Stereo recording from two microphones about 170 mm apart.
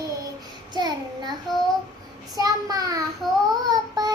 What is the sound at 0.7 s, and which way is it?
Child singing, 25° right (ahead or behind).